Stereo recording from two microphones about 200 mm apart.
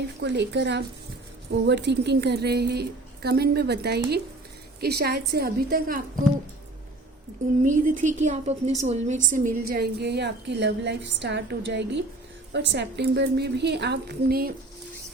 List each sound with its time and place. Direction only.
0.2 s a woman's voice: 60° right (ahead or behind)
7.6 s a woman's voice: 40° right (ahead or behind)